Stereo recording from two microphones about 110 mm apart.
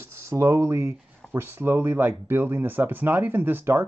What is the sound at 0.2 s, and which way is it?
Speech, 25° right (ahead or behind).